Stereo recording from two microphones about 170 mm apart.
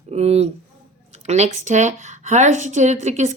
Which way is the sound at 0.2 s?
40° right (ahead or behind).